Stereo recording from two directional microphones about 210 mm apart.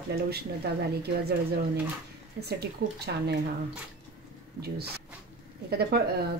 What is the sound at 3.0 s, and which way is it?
Speech, 50° right (ahead or behind).